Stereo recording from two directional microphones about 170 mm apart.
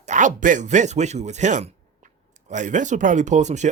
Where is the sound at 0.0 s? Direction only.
45° right (ahead or behind).